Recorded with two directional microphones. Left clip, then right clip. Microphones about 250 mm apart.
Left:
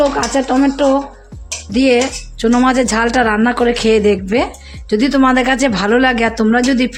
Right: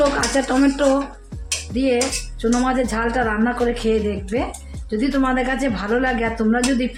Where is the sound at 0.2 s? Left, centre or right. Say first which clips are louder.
Left 4 dB; left.